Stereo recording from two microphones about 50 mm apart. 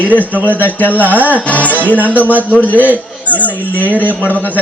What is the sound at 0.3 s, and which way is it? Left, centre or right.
Speech, right.